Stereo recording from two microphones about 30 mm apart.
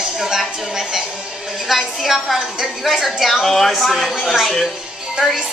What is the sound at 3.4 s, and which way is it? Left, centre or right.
Speech, centre.